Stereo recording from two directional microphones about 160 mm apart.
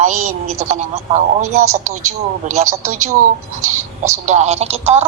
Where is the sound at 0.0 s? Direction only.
45° right (ahead or behind).